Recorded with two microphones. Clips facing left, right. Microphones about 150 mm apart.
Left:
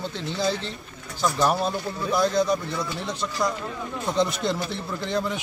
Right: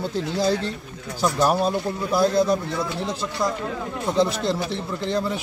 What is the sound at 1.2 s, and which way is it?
A man's voice, 10° right (ahead or behind).